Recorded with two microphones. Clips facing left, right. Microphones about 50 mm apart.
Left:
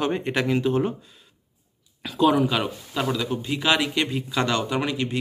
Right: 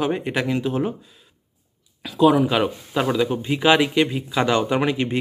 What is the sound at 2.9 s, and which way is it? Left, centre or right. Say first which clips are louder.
Speech: right 3 dB; right.